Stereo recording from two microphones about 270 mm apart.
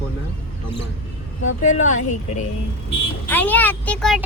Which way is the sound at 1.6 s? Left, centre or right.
Left.